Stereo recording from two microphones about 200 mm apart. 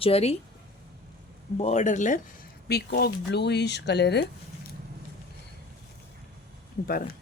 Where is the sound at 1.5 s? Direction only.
35° left (ahead or behind).